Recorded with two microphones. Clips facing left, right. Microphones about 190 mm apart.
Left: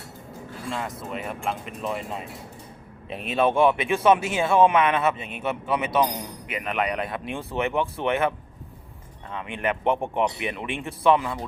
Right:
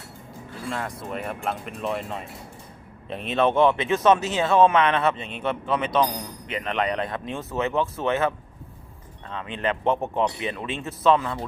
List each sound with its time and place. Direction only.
0.7 s a man's voice: centre (ahead or behind)
9.3 s a man's voice: 15° left (ahead or behind)